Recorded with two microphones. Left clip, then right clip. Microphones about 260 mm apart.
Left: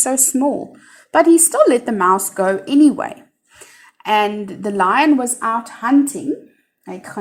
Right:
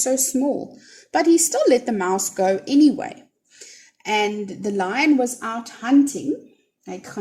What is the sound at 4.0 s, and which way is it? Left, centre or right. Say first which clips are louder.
Speech: left 5 dB; centre.